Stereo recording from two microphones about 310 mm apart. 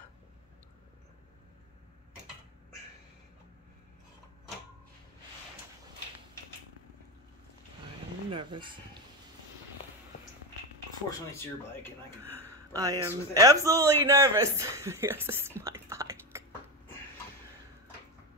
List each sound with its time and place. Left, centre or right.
8.3 s a sound: centre
11.1 s speech: centre
12.5 s a man's voice: centre